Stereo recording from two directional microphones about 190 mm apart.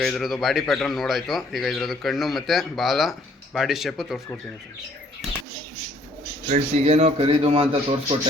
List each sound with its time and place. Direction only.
0.0 s a man's voice: centre (ahead or behind)
6.5 s a man's voice: 40° right (ahead or behind)